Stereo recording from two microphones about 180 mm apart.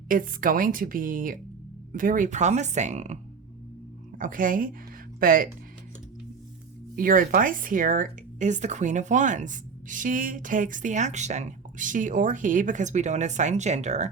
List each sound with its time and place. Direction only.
0.1 s speech: 50° right (ahead or behind)
4.2 s speech: 50° right (ahead or behind)
6.9 s speech: 50° right (ahead or behind)